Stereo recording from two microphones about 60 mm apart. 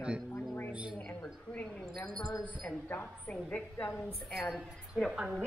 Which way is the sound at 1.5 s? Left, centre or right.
Centre.